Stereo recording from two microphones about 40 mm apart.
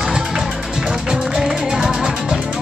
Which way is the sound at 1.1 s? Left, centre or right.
Centre.